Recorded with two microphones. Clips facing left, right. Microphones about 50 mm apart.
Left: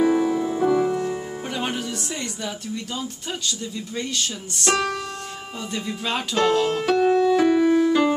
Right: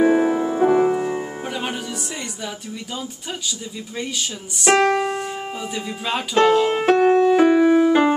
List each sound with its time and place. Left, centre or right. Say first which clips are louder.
0.0 s music: right 3 dB; right
1.5 s music: left 2 dB; centre
2.4 s speech: left 1 dB; centre
4.7 s keyboard: right 8 dB; right
5.8 s speech: even; centre
6.7 s music: right 4 dB; right